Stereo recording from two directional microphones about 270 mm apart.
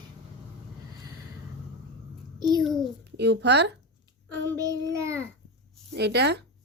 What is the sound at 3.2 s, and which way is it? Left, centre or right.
Speech, right.